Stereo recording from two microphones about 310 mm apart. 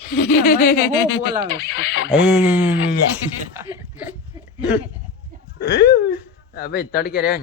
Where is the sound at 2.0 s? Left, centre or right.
Centre.